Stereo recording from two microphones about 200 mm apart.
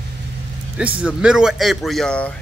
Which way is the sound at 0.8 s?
5° right (ahead or behind).